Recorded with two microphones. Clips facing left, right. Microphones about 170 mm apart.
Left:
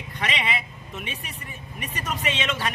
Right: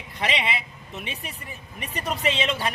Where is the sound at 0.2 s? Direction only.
30° right (ahead or behind).